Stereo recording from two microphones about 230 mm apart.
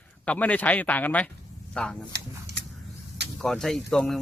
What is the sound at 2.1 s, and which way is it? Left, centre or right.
Speech, right.